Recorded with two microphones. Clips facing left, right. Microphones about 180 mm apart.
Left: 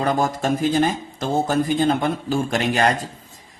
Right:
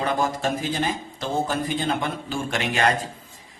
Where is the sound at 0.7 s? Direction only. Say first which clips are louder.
Left 6 dB; 45° left (ahead or behind).